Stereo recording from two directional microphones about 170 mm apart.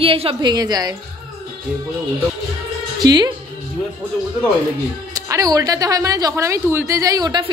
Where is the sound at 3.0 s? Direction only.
25° right (ahead or behind).